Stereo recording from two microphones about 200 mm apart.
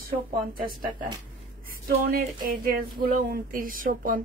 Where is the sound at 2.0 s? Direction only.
45° right (ahead or behind).